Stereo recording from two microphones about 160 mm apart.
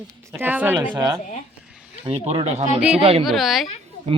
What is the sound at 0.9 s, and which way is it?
Speech, 25° right (ahead or behind).